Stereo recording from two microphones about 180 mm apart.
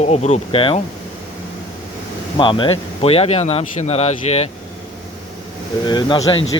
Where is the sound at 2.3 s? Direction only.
25° left (ahead or behind).